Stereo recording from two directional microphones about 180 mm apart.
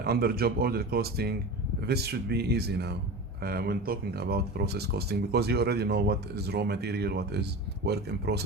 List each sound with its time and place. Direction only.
0.0 s speech: 60° right (ahead or behind)